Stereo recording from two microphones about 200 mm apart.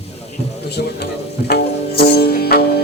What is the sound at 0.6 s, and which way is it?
Music, 55° left (ahead or behind).